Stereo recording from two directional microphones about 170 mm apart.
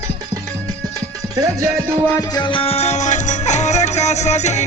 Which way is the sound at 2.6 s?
35° left (ahead or behind).